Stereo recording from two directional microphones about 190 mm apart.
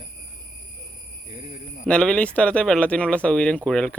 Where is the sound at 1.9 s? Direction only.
5° left (ahead or behind).